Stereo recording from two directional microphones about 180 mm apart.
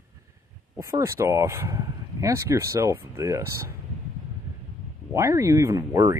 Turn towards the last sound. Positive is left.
turn(degrees=-15)  # may be behind; listen again after turning